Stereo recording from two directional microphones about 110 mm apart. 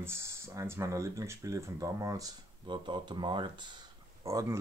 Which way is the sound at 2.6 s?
50° right (ahead or behind).